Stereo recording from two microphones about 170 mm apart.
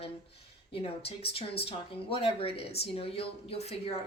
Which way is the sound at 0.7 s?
35° left (ahead or behind).